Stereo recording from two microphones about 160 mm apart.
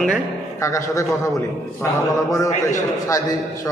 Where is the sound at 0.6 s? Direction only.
20° left (ahead or behind).